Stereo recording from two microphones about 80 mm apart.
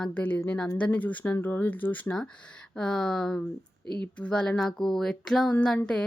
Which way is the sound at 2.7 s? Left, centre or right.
Centre.